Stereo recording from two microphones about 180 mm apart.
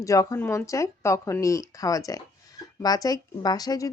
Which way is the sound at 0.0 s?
20° left (ahead or behind).